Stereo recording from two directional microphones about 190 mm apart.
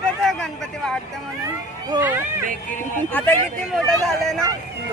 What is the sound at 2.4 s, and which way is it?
Speech, 40° right (ahead or behind).